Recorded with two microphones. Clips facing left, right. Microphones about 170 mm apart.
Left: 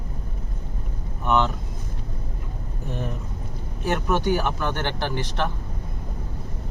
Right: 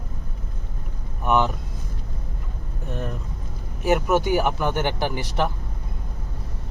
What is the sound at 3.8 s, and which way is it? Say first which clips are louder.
Speech: right 4 dB; 10° right (ahead or behind).